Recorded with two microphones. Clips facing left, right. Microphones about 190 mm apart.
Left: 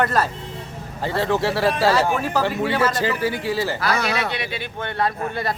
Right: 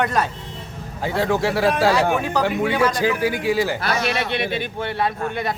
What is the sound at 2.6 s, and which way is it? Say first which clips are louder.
Speech: right 1 dB; centre (ahead or behind).